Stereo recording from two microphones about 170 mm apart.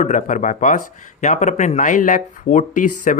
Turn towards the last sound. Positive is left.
turn(degrees=50)  # may be behind; listen again after turning